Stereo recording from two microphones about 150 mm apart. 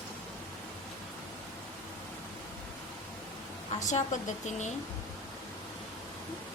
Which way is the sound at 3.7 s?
55° left (ahead or behind).